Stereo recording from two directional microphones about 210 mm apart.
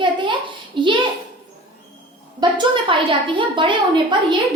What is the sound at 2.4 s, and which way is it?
A woman's voice, 20° right (ahead or behind).